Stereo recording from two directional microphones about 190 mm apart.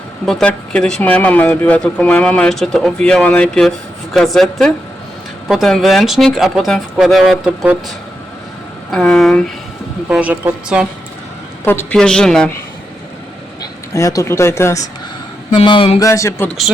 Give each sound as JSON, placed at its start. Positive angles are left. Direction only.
{"t": 0.3, "sound": "a woman's voice", "side_deg": 5}
{"t": 11.6, "sound": "speech", "side_deg": 10}
{"t": 13.9, "sound": "speech", "side_deg": 15}
{"t": 15.5, "sound": "a sound", "side_deg": 30}
{"t": 16.0, "sound": "speech", "side_deg": 15}